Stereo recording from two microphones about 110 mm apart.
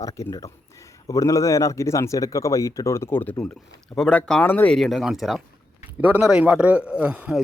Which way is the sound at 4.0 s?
10° left (ahead or behind).